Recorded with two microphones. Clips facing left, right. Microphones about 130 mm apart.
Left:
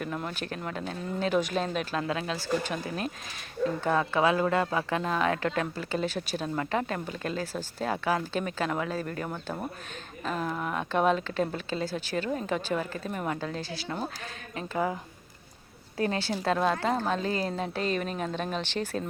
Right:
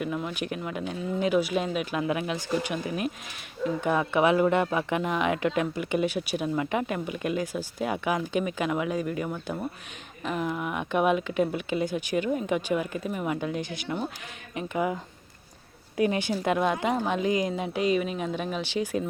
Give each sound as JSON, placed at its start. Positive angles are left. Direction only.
{"t": 0.0, "sound": "speech", "side_deg": -5}
{"t": 10.2, "sound": "speech", "side_deg": -10}
{"t": 16.0, "sound": "speech", "side_deg": -15}